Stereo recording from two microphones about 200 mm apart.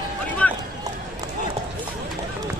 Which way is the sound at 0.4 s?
5° left (ahead or behind).